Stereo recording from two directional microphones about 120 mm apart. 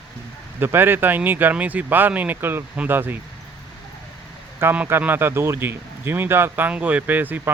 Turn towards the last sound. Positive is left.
turn(degrees=-15)  # may be behind; listen again after turning